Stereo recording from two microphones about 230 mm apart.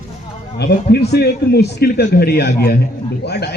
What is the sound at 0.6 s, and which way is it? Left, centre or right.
A man's voice, left.